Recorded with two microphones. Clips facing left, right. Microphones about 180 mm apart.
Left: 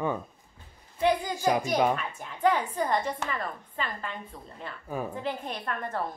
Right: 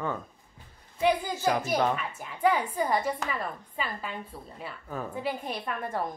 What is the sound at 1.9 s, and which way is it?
Speech, 5° right (ahead or behind).